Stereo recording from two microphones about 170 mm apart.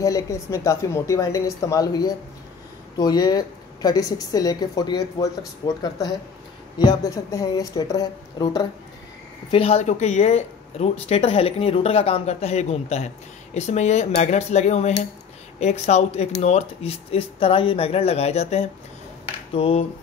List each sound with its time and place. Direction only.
0.0 s a woman's voice: 20° left (ahead or behind)
9.5 s speech: 35° left (ahead or behind)